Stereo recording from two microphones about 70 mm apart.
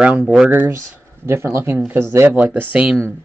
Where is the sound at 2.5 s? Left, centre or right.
Right.